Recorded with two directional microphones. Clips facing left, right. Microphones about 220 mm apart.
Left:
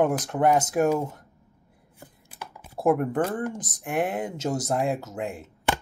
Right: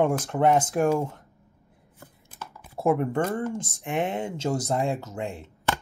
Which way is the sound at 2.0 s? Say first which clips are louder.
Left 1 dB; 15° left (ahead or behind).